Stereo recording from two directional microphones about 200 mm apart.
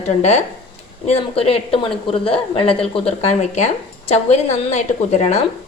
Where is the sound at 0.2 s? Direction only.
35° left (ahead or behind).